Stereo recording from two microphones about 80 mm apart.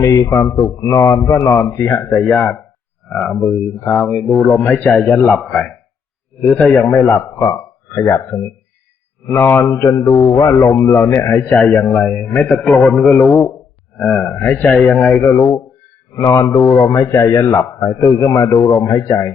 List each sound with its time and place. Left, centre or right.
0.0 s a man's voice: left
2.2 s a man's voice: centre
3.8 s a man's voice: centre
5.1 s a man's voice: centre
7.9 s a man's voice: left
11.7 s a man's voice: centre
12.5 s a man's voice: centre
14.8 s a man's voice: centre
15.2 s a man's voice: left